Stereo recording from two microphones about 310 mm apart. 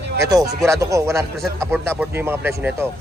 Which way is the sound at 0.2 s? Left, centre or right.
Centre.